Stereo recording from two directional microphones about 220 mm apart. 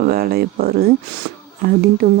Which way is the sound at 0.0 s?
45° right (ahead or behind).